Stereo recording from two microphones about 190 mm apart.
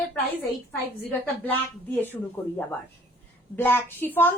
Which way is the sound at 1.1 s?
10° left (ahead or behind).